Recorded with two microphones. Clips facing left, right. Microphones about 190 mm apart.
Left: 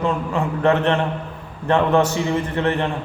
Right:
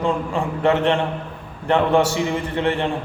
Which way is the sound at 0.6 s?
25° right (ahead or behind).